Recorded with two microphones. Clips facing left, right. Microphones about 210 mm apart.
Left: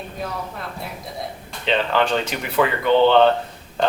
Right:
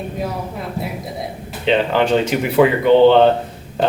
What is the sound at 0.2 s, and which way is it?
Speech, 5° right (ahead or behind).